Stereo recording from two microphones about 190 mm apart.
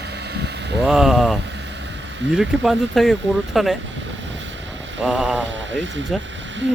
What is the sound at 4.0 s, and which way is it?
Vehicle, 75° right (ahead or behind).